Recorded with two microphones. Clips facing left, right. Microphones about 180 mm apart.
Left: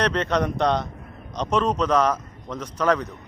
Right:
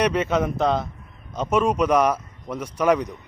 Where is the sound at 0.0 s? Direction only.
10° right (ahead or behind).